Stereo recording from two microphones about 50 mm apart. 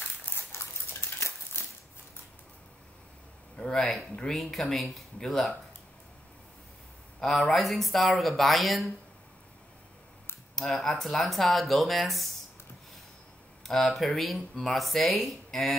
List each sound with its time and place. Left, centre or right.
0.2 s dog: left
1.6 s a sound: left
3.5 s speech: centre
7.2 s speech: centre
10.5 s speech: centre
13.7 s speech: centre